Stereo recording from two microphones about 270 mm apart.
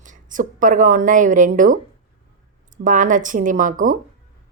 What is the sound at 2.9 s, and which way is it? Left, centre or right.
A woman's voice, right.